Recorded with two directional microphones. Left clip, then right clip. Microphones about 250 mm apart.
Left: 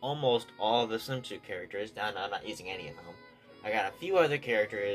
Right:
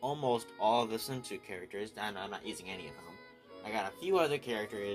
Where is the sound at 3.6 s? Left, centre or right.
Right.